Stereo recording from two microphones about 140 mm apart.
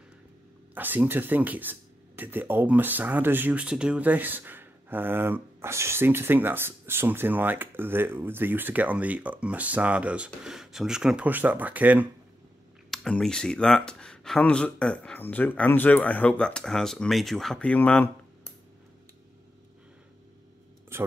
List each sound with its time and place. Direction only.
0.7 s speech: 15° right (ahead or behind)
12.9 s speech: 5° left (ahead or behind)
20.9 s speech: 15° right (ahead or behind)